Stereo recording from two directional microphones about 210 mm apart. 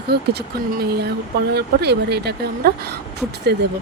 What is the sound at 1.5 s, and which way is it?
Speech, 50° right (ahead or behind).